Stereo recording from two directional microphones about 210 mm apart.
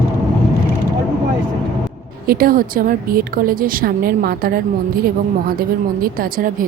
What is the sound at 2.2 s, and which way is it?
A woman's voice, 45° right (ahead or behind).